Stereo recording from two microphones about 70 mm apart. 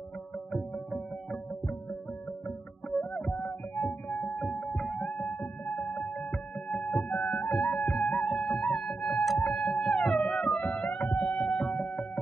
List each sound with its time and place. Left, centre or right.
0.5 s music: centre
3.0 s music: centre
5.0 s music: centre
6.1 s music: centre
10.6 s music: centre
11.1 s music: centre